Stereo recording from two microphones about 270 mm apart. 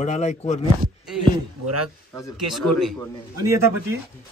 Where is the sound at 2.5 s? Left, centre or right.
Centre.